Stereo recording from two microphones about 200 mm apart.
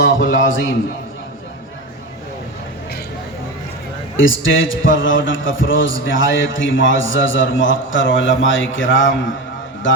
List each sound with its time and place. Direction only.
0.3 s a man's voice: 70° left (ahead or behind)
4.2 s a man's voice: 75° left (ahead or behind)